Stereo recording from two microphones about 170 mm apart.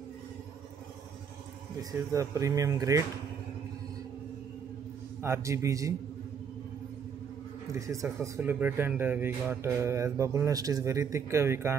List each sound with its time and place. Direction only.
1.8 s speech: 20° right (ahead or behind)
5.2 s speech: 15° right (ahead or behind)
7.7 s speech: 20° right (ahead or behind)